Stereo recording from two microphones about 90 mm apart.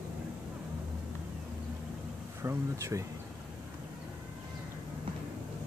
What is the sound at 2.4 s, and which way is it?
Speech, 35° right (ahead or behind).